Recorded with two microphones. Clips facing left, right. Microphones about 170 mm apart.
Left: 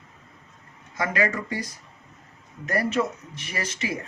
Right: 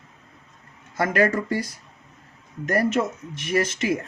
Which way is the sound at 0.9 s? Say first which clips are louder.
Right 5 dB; 50° right (ahead or behind).